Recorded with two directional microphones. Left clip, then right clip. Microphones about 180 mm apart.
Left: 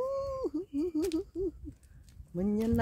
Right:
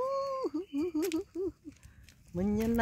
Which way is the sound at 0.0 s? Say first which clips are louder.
Right 1 dB; 5° right (ahead or behind).